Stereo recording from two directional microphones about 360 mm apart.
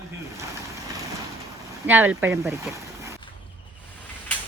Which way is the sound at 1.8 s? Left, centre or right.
Centre.